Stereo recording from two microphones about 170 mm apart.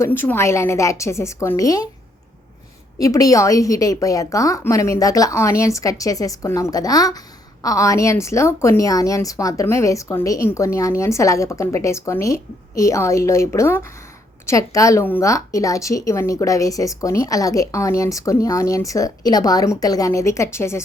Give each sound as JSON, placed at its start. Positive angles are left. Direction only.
{"t": 0.0, "sound": "a woman's voice", "side_deg": 10}
{"t": 3.0, "sound": "a woman's voice", "side_deg": 20}